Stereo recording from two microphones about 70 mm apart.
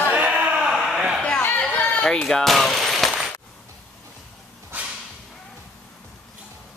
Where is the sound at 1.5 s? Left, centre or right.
Left.